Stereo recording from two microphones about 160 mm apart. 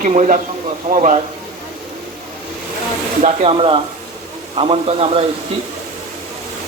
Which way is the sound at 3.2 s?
40° right (ahead or behind).